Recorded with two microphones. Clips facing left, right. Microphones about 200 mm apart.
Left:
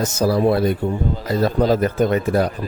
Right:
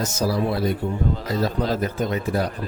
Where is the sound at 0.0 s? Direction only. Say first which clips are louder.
Left 6 dB; 55° left (ahead or behind).